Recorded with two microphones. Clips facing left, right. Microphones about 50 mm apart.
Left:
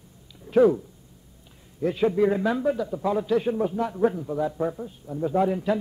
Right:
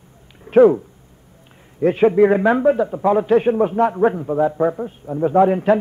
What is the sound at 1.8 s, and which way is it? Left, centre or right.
A man's voice, right.